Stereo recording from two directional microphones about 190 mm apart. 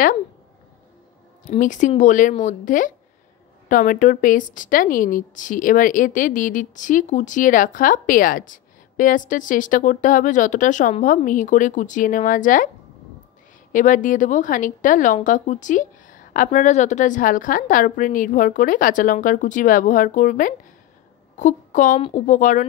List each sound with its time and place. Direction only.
1.6 s a woman's voice: 40° left (ahead or behind)
13.7 s a woman's voice: 45° left (ahead or behind)